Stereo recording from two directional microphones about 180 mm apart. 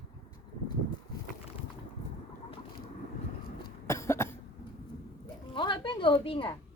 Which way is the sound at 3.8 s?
15° left (ahead or behind).